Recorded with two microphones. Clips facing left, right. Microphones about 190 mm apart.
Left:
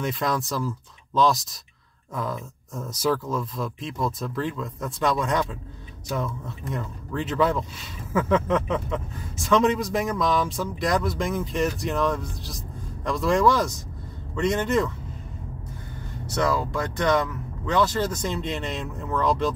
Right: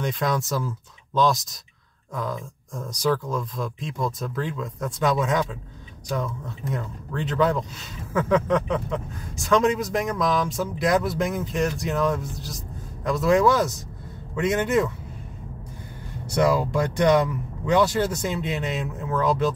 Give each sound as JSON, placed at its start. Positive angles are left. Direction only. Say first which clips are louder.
{"t": 0.0, "sound": "speech", "louder": "right 1 dB", "side_deg": 0}
{"t": 16.3, "sound": "speech", "louder": "right 4 dB", "side_deg": -15}